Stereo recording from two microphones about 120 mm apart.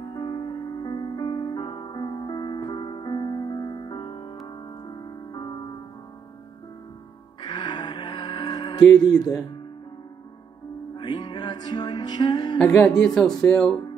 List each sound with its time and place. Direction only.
0.0 s music: 40° left (ahead or behind)
7.4 s music: 40° left (ahead or behind)
11.0 s music: 35° left (ahead or behind)
12.5 s speech: 10° left (ahead or behind)